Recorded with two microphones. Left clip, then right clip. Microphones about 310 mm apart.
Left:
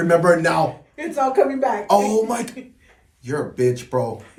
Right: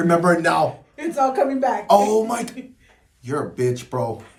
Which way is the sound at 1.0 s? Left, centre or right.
Centre.